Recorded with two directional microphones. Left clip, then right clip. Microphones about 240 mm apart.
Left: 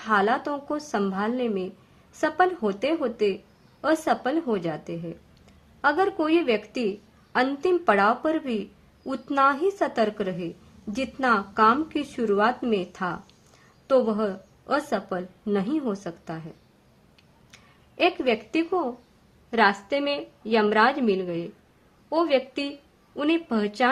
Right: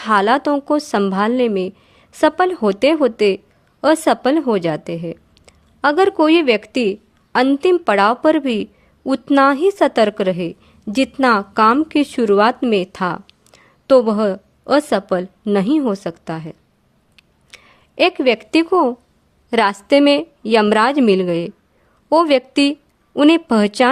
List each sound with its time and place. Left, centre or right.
0.0 s a woman's voice: right
17.2 s a sound: right
19.5 s a woman's voice: right